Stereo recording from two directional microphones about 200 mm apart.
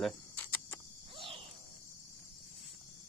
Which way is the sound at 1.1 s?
25° right (ahead or behind).